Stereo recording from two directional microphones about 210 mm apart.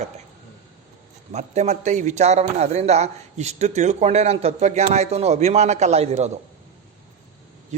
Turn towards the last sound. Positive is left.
turn(degrees=-35)  # may be behind; listen again after turning